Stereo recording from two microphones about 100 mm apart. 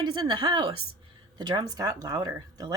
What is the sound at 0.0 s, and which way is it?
A woman's voice, 50° right (ahead or behind).